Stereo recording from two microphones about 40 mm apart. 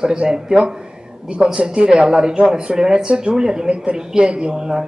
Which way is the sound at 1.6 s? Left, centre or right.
Right.